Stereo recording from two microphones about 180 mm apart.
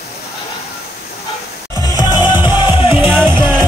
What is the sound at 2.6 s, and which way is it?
Music, 25° left (ahead or behind).